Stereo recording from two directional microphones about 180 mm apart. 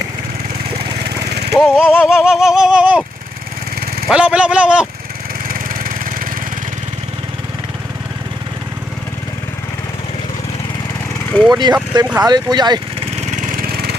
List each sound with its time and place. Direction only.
1.5 s speech: 5° right (ahead or behind)
4.1 s speech: 5° right (ahead or behind)
5.5 s engine: 50° right (ahead or behind)
11.5 s speech: 20° right (ahead or behind)
13.1 s lawn mower: 45° right (ahead or behind)